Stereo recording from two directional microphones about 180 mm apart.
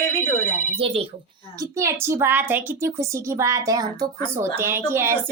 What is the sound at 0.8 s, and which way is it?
Speech, 30° right (ahead or behind).